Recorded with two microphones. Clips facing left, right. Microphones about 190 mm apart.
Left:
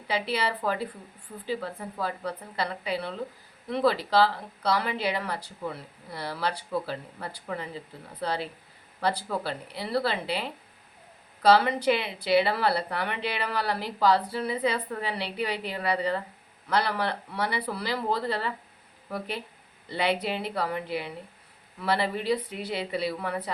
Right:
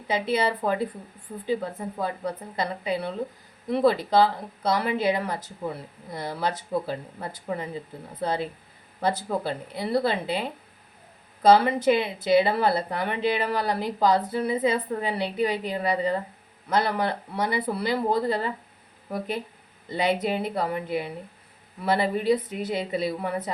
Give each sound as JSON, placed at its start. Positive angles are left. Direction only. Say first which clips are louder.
{"t": 0.1, "sound": "speech", "louder": "right 4 dB", "side_deg": -20}
{"t": 9.0, "sound": "speech", "louder": "right 3 dB", "side_deg": -20}
{"t": 20.0, "sound": "speech", "louder": "right 3 dB", "side_deg": -20}